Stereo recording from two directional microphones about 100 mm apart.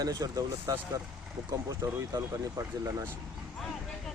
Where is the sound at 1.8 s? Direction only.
35° right (ahead or behind).